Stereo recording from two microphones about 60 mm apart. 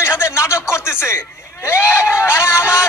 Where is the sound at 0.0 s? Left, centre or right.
Left.